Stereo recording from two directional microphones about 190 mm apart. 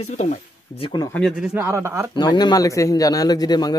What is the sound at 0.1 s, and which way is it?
Speech, 35° left (ahead or behind).